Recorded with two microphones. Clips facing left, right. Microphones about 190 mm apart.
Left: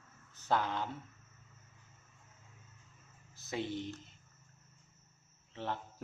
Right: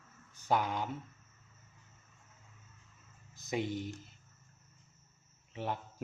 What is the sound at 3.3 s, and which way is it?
Speech, 15° right (ahead or behind).